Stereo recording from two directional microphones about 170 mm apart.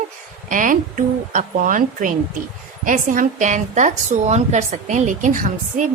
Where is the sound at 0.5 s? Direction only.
50° right (ahead or behind).